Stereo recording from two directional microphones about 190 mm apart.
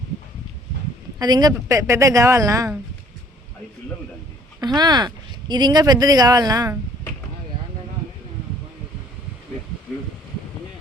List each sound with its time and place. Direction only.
1.2 s a woman's voice: 20° right (ahead or behind)
4.6 s speech: 20° right (ahead or behind)